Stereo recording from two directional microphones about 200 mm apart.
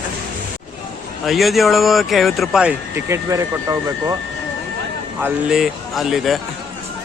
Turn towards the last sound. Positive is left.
turn(degrees=0)  # may be behind; listen again after turning